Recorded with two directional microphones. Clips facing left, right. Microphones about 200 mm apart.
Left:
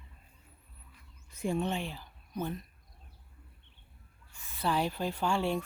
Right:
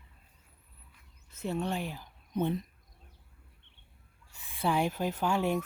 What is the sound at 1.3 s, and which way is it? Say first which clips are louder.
Speech: left 2 dB; 10° left (ahead or behind).